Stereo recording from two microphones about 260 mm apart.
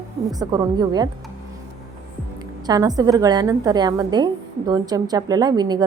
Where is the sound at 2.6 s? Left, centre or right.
Centre.